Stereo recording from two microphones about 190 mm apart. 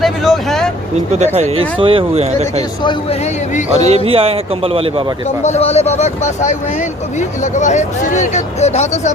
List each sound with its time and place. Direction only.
0.0 s speech: centre (ahead or behind)
1.2 s speech: 35° right (ahead or behind)
3.8 s speech: 35° right (ahead or behind)
5.4 s speech: 35° left (ahead or behind)